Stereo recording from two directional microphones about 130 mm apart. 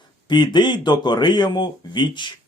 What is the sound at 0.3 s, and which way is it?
Speech, 35° left (ahead or behind).